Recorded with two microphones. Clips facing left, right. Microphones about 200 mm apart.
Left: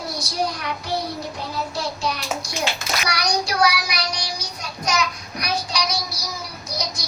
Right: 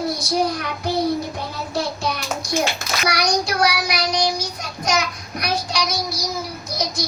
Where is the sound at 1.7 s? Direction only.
55° right (ahead or behind).